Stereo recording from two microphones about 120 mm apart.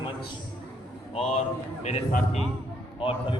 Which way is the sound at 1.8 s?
70° left (ahead or behind).